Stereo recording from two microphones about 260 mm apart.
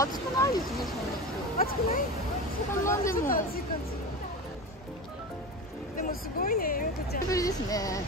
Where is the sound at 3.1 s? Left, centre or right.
Left.